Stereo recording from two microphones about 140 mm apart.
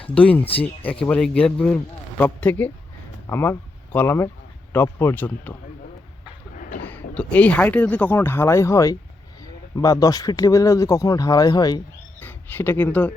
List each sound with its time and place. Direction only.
0.1 s speech: 10° left (ahead or behind)
6.8 s speech: 10° left (ahead or behind); by 11.8 s 30° left (ahead or behind)
12.2 s speech: 15° left (ahead or behind)